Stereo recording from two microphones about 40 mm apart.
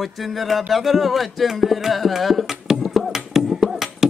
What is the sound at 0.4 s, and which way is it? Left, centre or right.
Music, centre.